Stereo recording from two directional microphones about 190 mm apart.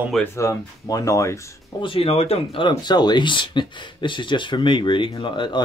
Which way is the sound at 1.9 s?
30° left (ahead or behind).